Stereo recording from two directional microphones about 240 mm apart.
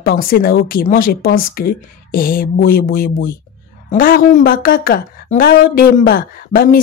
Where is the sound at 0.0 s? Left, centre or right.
Left.